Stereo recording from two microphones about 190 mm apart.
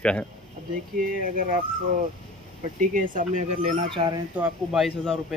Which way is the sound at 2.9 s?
45° right (ahead or behind).